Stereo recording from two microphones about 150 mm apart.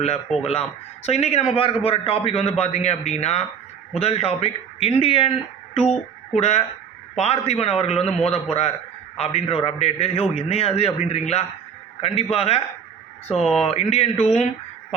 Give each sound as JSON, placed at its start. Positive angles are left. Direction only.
{"t": 1.0, "sound": "a man's voice", "side_deg": 45}
{"t": 13.4, "sound": "speech", "side_deg": 0}
{"t": 13.7, "sound": "a man's voice", "side_deg": 45}